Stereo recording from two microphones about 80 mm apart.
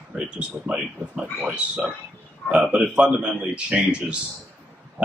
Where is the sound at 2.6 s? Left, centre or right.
Centre.